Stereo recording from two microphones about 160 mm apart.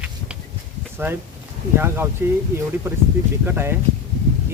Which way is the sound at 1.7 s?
15° right (ahead or behind).